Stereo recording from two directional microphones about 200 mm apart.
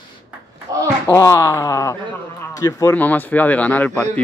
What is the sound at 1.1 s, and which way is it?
A man's voice, 15° left (ahead or behind).